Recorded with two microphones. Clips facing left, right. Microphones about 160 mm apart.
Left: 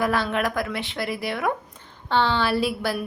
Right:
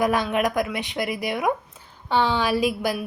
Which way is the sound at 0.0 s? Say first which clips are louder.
Right 2 dB; 15° right (ahead or behind).